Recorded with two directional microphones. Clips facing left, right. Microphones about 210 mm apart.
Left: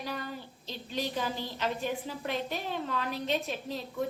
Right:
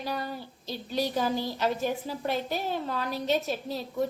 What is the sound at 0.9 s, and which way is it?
A woman's voice, 40° right (ahead or behind).